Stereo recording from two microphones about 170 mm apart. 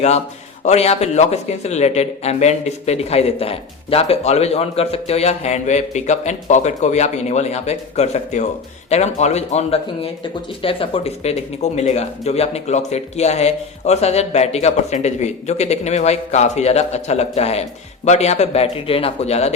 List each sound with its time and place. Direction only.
0.6 s speech: 40° left (ahead or behind)